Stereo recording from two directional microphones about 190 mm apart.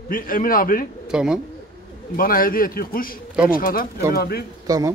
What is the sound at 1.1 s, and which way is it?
Speech, 5° right (ahead or behind).